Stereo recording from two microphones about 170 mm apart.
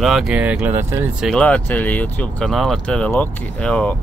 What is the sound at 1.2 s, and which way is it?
Speech, 5° left (ahead or behind).